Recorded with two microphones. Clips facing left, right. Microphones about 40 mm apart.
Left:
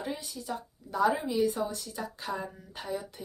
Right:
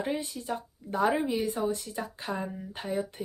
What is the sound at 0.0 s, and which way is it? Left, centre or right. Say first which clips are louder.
Speech: right 5 dB; right.